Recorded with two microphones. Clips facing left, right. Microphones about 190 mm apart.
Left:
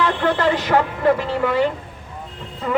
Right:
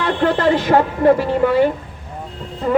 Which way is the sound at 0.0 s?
40° right (ahead or behind).